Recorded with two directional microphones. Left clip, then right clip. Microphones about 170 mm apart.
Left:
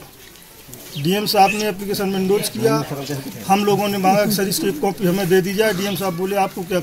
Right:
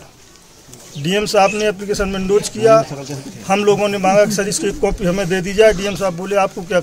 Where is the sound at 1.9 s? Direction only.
10° right (ahead or behind).